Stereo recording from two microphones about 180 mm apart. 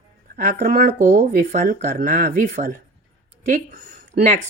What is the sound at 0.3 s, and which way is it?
Speech, 50° right (ahead or behind).